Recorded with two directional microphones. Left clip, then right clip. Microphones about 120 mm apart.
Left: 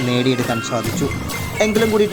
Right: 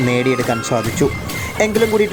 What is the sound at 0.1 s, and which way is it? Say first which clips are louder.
Speech: even; 40° right (ahead or behind).